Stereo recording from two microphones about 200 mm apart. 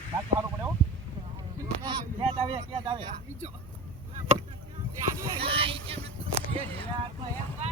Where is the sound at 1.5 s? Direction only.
20° right (ahead or behind).